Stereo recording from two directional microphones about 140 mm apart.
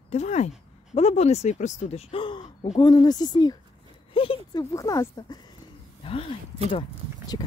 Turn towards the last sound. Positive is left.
turn(degrees=35)  # may be behind; listen again after turning